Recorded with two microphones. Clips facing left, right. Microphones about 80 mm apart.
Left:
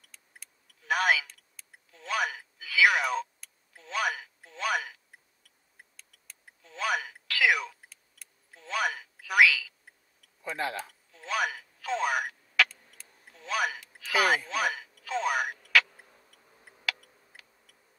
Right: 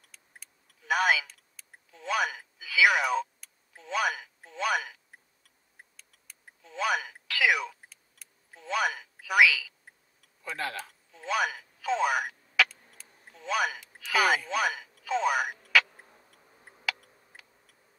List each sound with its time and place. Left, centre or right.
0.1 s tick: centre
5.9 s a sound: centre
10.5 s speech: left
11.1 s telephone: centre
13.3 s speech: centre
16.9 s tick: centre